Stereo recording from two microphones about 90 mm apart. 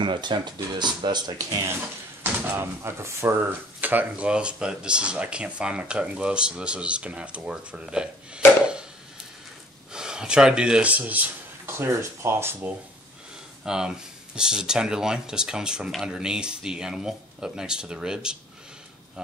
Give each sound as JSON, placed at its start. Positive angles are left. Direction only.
{"t": 0.0, "sound": "speech", "side_deg": -60}
{"t": 2.5, "sound": "speech", "side_deg": -30}
{"t": 8.4, "sound": "a sound", "side_deg": 25}
{"t": 9.9, "sound": "a man's voice", "side_deg": -10}
{"t": 11.7, "sound": "speech", "side_deg": -30}
{"t": 13.7, "sound": "speech", "side_deg": -10}